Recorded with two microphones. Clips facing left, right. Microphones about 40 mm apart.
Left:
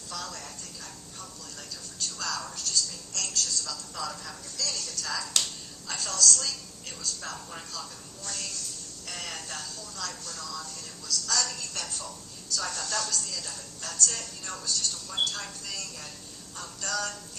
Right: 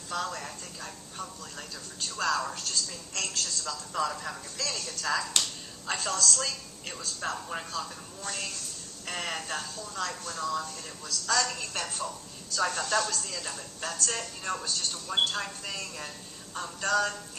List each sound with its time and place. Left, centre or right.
0.1 s speech: right